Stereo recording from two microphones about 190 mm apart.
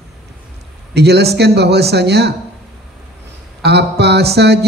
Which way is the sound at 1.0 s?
60° right (ahead or behind).